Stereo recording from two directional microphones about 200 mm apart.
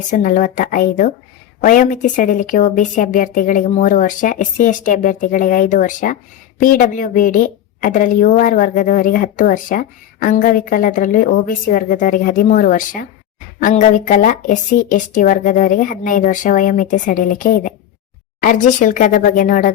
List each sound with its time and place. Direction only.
0.1 s a woman's voice: 40° left (ahead or behind)